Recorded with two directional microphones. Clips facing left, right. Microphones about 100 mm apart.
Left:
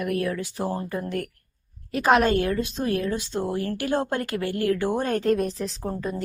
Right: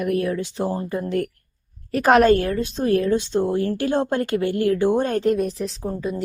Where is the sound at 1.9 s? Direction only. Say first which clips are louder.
Right 5 dB; 45° right (ahead or behind); by 5.3 s 25° right (ahead or behind).